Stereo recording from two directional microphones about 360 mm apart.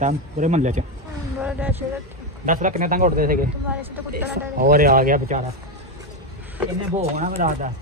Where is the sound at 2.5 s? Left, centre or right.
Right.